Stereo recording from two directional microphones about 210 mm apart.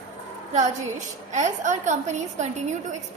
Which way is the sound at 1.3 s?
35° right (ahead or behind).